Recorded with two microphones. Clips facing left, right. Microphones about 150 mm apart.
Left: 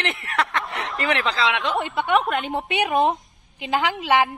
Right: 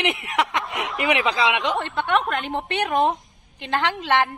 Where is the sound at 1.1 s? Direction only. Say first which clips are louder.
Right 2 dB; 10° right (ahead or behind).